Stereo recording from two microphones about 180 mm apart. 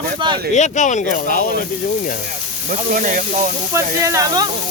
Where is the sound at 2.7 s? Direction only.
50° right (ahead or behind).